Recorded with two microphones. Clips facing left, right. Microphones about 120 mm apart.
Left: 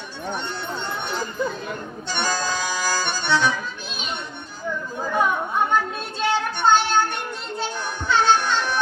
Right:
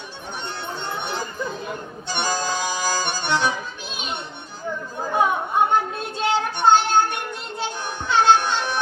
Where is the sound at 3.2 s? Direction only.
50° right (ahead or behind).